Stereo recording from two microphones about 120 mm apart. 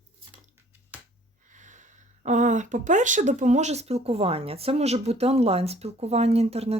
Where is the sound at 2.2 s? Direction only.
90° right.